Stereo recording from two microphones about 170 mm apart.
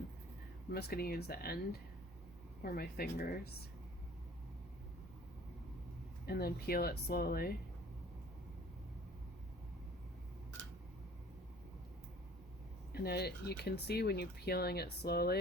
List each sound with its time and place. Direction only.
0.7 s speech: 70° left (ahead or behind)
2.6 s speech: 65° left (ahead or behind)
6.2 s speech: 65° left (ahead or behind)
12.9 s speech: 70° left (ahead or behind)